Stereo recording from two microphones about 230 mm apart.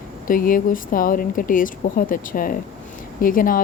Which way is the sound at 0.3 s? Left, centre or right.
Left.